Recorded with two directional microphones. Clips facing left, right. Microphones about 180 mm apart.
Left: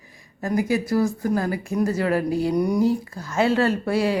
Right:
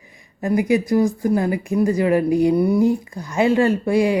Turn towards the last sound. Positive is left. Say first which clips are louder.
# right 4 dB
turn(degrees=-15)  # may be behind; listen again after turning